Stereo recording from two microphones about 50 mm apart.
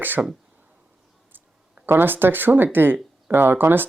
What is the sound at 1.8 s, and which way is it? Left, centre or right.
Speech, right.